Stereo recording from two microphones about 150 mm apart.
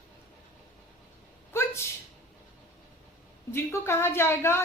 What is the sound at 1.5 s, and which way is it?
Sneeze, 15° left (ahead or behind).